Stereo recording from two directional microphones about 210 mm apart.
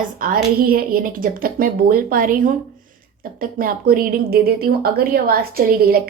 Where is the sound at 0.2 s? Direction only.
45° right (ahead or behind).